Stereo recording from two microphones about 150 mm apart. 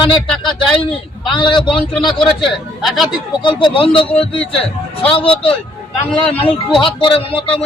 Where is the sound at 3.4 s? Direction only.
30° left (ahead or behind).